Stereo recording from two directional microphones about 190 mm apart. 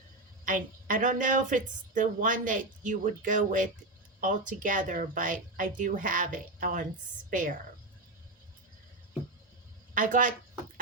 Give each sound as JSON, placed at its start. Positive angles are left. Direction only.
{"t": 0.4, "sound": "a woman's voice", "side_deg": -45}
{"t": 9.9, "sound": "speech", "side_deg": -45}